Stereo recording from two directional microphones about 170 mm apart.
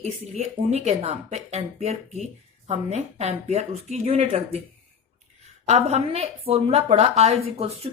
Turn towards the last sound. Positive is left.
turn(degrees=-35)  # may be behind; listen again after turning